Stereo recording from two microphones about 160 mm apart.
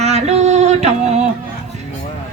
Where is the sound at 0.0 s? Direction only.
45° right (ahead or behind).